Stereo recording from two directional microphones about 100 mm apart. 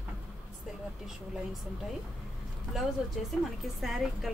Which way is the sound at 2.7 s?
Centre (ahead or behind).